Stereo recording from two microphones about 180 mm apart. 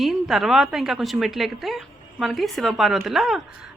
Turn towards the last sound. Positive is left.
turn(degrees=0)  # may be behind; listen again after turning